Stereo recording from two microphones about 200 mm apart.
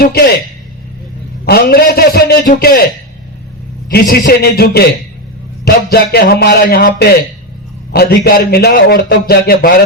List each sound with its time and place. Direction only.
0.0 s a man's voice: 50° left (ahead or behind)
1.5 s a man's voice: 50° left (ahead or behind)
3.8 s a man's voice: 45° left (ahead or behind)